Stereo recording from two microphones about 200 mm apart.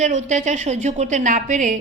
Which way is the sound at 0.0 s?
35° right (ahead or behind).